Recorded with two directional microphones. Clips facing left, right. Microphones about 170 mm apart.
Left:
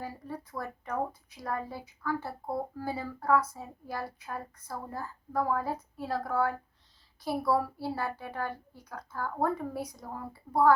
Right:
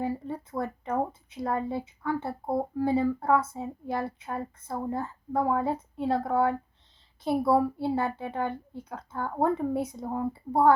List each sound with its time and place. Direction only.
0.0 s speech: 25° right (ahead or behind)